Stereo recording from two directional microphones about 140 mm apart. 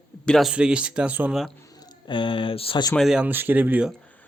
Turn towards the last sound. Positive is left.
turn(degrees=-10)  # may be behind; listen again after turning